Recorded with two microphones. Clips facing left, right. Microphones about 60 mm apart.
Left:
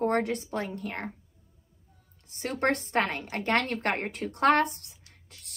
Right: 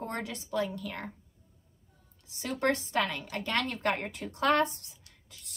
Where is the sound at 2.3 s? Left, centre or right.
Left.